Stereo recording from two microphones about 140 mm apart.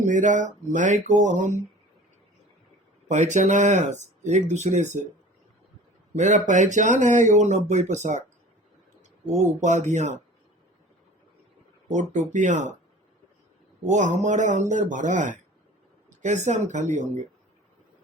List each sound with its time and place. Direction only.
0.0 s speech: 65° right (ahead or behind)
3.1 s speech: 60° right (ahead or behind)
6.1 s speech: 60° right (ahead or behind)
9.2 s speech: 55° right (ahead or behind)
11.9 s speech: 60° right (ahead or behind)
13.9 s speech: 60° right (ahead or behind)